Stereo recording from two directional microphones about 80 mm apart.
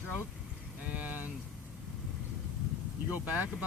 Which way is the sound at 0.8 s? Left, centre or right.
Centre.